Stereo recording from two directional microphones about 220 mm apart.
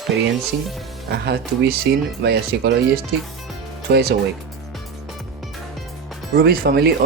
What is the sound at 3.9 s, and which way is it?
Speech, 45° right (ahead or behind).